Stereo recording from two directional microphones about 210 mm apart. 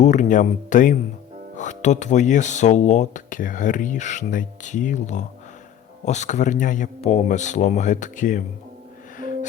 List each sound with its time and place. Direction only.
0.0 s speech: 35° left (ahead or behind)
9.1 s music: 40° left (ahead or behind)